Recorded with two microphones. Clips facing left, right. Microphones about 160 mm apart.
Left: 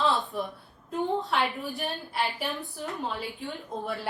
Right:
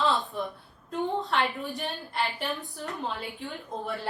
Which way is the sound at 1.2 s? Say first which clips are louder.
Even; centre (ahead or behind).